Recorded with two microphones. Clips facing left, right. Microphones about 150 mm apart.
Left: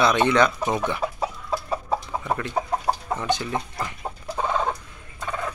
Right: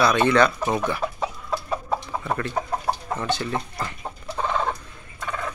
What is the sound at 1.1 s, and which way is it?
Chicken, 5° left (ahead or behind).